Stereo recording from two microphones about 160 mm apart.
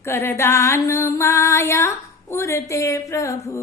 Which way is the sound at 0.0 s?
15° left (ahead or behind).